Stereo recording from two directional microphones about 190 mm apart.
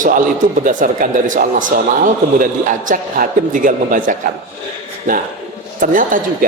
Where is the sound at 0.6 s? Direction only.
45° right (ahead or behind).